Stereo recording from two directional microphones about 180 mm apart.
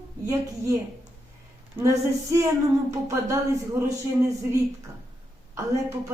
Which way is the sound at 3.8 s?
15° right (ahead or behind).